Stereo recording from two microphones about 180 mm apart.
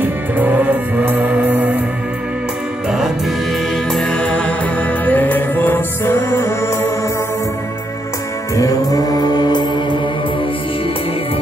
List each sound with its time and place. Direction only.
0.0 s music: 10° right (ahead or behind)
3.7 s music: 5° left (ahead or behind)
8.5 s music: 20° left (ahead or behind)